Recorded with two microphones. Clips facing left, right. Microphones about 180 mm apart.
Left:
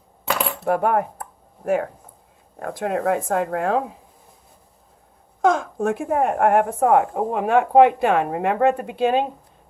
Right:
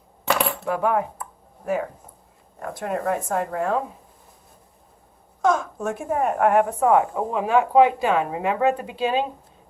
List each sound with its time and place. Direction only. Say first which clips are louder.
0.6 s speech: left 3 dB; 55° left (ahead or behind)
5.4 s a woman's voice: left 3 dB; 55° left (ahead or behind)